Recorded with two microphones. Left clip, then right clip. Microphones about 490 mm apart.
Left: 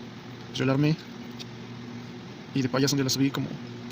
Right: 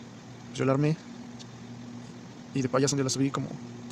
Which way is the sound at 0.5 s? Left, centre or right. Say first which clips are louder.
Left 1 dB; right.